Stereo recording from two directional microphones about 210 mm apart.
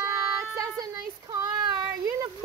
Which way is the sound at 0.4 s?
15° right (ahead or behind).